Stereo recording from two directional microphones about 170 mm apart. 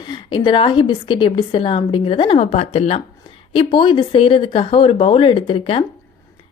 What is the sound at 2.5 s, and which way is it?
Speech, 40° left (ahead or behind).